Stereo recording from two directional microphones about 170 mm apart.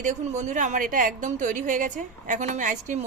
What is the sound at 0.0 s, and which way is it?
A woman's voice, 45° right (ahead or behind).